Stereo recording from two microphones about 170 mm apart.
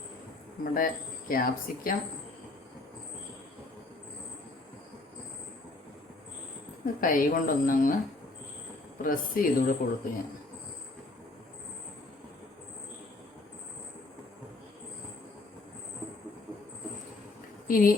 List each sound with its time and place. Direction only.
0.6 s speech: 55° left (ahead or behind)
7.0 s speech: 55° left (ahead or behind)
9.0 s speech: 55° left (ahead or behind)
17.7 s a woman's voice: 55° left (ahead or behind)